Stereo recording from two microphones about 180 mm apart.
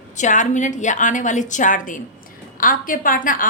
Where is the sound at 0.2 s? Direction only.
45° left (ahead or behind).